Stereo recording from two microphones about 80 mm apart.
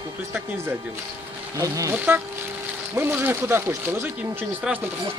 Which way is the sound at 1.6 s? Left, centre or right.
Right.